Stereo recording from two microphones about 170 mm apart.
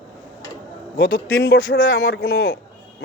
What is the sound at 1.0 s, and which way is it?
A man's voice, 75° left (ahead or behind).